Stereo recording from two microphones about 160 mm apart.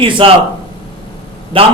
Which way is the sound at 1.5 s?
35° right (ahead or behind).